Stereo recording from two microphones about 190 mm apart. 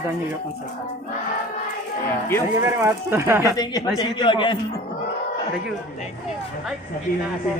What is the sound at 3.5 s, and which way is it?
A man's voice, 20° left (ahead or behind).